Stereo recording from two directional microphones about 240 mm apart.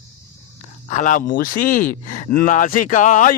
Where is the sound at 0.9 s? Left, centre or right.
Left.